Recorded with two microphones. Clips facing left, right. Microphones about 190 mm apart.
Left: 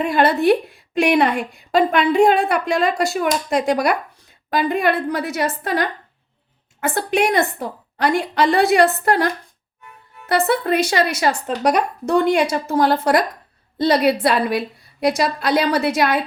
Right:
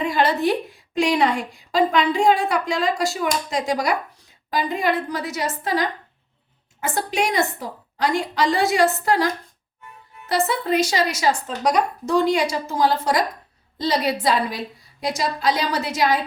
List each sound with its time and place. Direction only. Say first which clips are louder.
0.0 s a woman's voice: left 4 dB; 55° left (ahead or behind)